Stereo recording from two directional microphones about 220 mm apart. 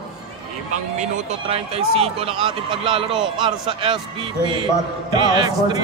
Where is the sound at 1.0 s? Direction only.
30° right (ahead or behind).